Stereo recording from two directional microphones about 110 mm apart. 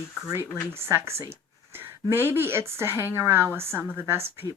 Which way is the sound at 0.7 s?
25° right (ahead or behind).